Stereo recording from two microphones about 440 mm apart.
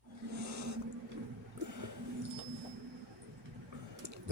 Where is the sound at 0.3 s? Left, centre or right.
Right.